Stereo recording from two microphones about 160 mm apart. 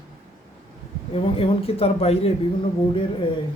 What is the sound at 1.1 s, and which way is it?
A man's voice, 35° left (ahead or behind).